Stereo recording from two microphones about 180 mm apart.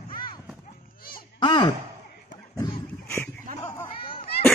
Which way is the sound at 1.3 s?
25° left (ahead or behind).